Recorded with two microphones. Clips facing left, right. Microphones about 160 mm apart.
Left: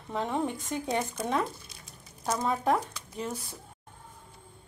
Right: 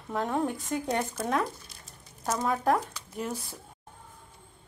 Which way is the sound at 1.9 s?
Centre (ahead or behind).